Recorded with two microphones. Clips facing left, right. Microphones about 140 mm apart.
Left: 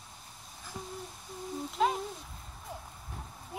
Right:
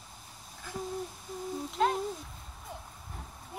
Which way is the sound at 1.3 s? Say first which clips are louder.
Even; centre (ahead or behind).